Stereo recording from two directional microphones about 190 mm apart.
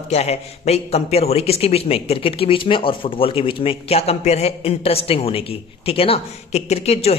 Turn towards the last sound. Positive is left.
turn(degrees=30)  # may be behind; listen again after turning